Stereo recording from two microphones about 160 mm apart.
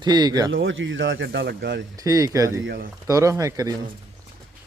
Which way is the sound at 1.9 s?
20° right (ahead or behind).